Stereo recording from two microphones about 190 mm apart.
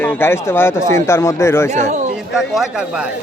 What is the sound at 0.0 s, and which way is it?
Speech, 10° left (ahead or behind).